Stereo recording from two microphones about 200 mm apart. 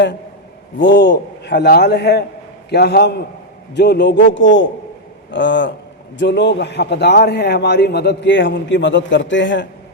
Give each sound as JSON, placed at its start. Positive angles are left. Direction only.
{"t": 0.9, "sound": "a man's voice", "side_deg": 60}